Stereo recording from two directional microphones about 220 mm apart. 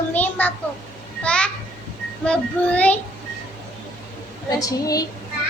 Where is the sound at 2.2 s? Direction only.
5° left (ahead or behind).